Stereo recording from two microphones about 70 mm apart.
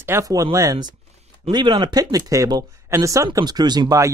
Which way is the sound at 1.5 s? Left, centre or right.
Right.